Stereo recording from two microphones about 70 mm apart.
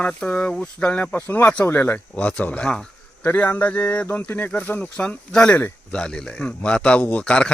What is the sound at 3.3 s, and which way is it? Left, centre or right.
Speech, left.